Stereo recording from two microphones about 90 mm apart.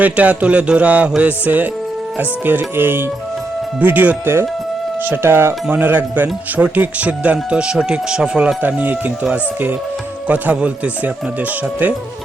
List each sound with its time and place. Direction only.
0.0 s speech: 15° right (ahead or behind)
8.6 s speech: 20° right (ahead or behind)